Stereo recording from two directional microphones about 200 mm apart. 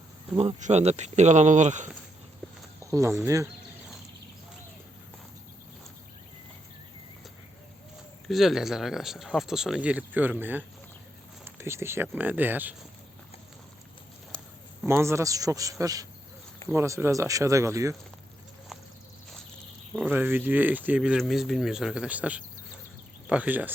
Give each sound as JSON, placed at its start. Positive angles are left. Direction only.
{"t": 0.3, "sound": "speech", "side_deg": -35}
{"t": 2.4, "sound": "walk", "side_deg": 5}
{"t": 2.8, "sound": "a man's voice", "side_deg": -15}
{"t": 8.3, "sound": "a man's voice", "side_deg": 0}
{"t": 14.8, "sound": "a man's voice", "side_deg": -15}
{"t": 19.9, "sound": "a man's voice", "side_deg": -5}